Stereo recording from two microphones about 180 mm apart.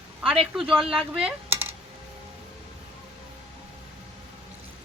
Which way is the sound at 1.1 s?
10° right (ahead or behind).